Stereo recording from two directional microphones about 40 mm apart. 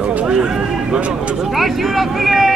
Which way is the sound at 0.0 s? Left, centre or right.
Right.